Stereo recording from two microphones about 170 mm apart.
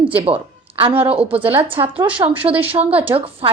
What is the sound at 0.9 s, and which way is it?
Speech, 10° right (ahead or behind).